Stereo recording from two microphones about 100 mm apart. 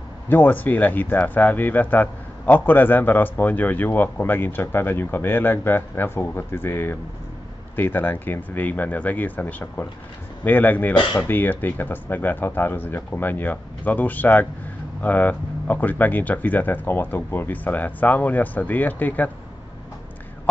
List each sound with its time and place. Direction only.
0.3 s speech: 20° left (ahead or behind)